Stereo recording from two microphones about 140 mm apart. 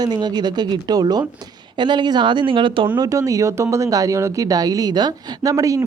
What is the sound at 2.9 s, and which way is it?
Speech, 25° right (ahead or behind).